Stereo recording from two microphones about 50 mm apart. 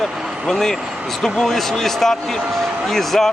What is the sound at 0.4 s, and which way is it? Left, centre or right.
A man's voice, centre.